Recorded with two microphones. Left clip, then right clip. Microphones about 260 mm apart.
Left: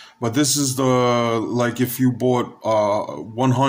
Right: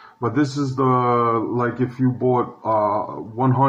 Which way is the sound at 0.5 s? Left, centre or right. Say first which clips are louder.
Left 1 dB; left.